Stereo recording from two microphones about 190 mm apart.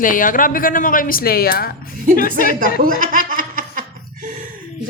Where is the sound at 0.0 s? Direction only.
45° left (ahead or behind).